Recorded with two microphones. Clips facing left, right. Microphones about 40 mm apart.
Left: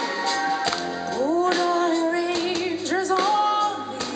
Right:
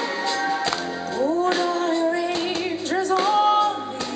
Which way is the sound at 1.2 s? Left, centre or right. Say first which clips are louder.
Even; right.